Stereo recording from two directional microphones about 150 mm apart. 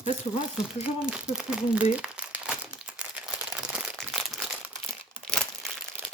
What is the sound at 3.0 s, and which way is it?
Crumpling, 5° right (ahead or behind).